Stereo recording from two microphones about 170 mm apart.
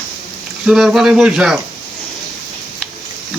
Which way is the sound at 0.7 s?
Centre (ahead or behind).